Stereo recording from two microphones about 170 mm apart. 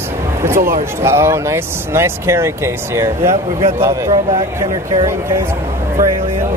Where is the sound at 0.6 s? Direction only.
50° right (ahead or behind).